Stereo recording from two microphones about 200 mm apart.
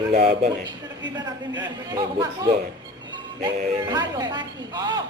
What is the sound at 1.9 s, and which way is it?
Speech, 20° right (ahead or behind).